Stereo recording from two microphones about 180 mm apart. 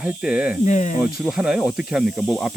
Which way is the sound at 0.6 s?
40° left (ahead or behind).